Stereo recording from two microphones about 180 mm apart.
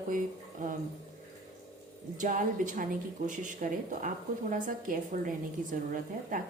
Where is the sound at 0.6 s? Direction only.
45° right (ahead or behind).